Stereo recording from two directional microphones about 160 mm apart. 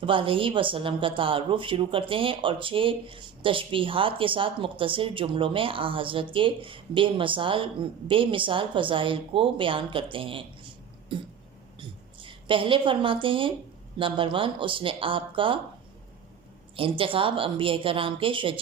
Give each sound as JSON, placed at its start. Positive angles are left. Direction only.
{"t": 0.0, "sound": "a woman's voice", "side_deg": -35}
{"t": 16.7, "sound": "a woman's voice", "side_deg": -35}